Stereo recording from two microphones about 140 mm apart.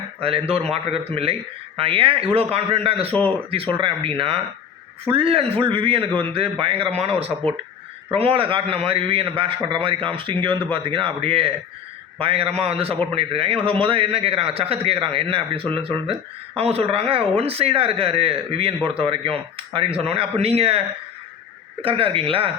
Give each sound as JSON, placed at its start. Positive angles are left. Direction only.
{"t": 0.2, "sound": "a man's voice", "side_deg": -45}